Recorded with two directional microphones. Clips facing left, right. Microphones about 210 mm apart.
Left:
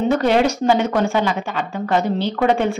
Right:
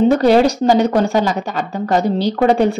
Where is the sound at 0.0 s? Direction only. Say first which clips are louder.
Right 5 dB; 35° right (ahead or behind).